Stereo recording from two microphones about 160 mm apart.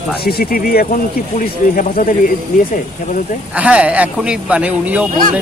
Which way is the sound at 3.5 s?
5° right (ahead or behind).